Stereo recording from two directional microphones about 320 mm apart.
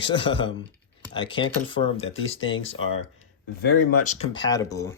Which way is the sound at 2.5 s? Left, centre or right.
Left.